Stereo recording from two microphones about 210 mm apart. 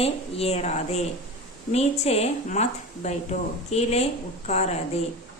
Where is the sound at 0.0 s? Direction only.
30° left (ahead or behind).